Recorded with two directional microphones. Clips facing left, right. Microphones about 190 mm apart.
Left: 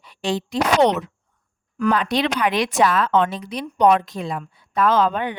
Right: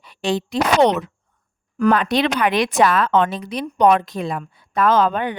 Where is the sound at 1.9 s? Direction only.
55° right (ahead or behind).